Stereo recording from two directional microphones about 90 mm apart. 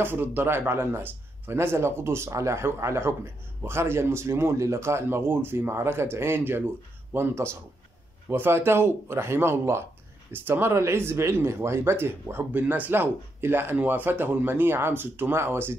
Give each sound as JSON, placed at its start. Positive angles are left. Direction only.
{"t": 0.0, "sound": "speech", "side_deg": -20}